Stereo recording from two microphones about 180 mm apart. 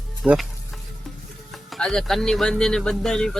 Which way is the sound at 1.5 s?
Centre (ahead or behind).